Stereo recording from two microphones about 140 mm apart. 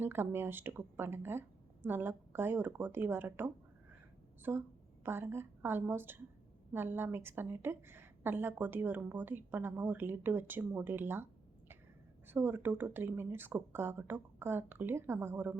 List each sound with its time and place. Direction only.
0.0 s a woman's voice: 15° right (ahead or behind)
12.3 s a woman's voice: 15° right (ahead or behind)